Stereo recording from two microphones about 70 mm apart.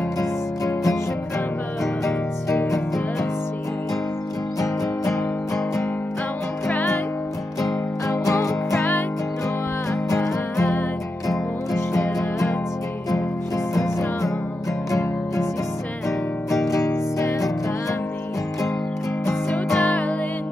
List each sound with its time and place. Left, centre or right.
0.2 s music: left
2.5 s music: left
4.6 s music: left
6.7 s music: left
8.1 s music: left
10.0 s music: left
13.7 s music: left
16.6 s music: left
19.8 s music: centre